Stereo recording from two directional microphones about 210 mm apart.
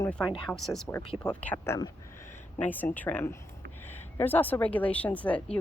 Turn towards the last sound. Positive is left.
turn(degrees=5)  # may be behind; listen again after turning